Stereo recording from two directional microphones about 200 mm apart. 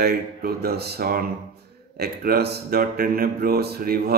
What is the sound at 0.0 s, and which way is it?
Speech, 50° right (ahead or behind).